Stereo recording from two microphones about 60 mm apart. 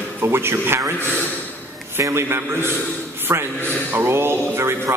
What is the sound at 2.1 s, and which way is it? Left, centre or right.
Speech, right.